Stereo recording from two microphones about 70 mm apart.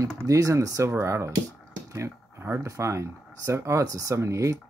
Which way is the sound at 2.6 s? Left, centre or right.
Right.